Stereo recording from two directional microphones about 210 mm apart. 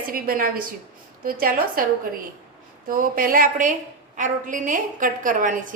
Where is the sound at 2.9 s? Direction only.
40° right (ahead or behind).